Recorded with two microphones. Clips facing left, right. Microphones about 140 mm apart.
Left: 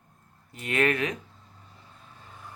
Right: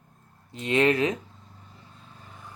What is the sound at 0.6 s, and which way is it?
Speech, 25° right (ahead or behind).